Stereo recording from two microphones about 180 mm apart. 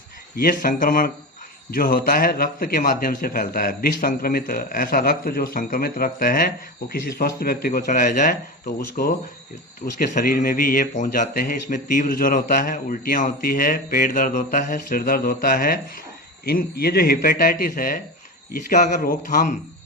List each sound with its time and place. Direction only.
0.3 s a man's voice: 50° left (ahead or behind)